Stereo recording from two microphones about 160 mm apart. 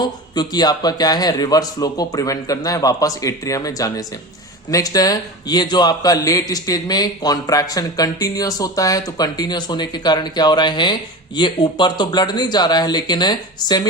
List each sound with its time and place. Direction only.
0.0 s a man's voice: 25° left (ahead or behind)